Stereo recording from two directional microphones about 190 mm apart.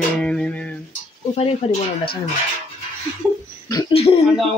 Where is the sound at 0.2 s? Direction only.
5° left (ahead or behind).